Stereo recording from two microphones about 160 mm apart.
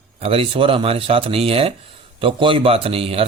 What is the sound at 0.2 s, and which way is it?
Speech, 35° right (ahead or behind).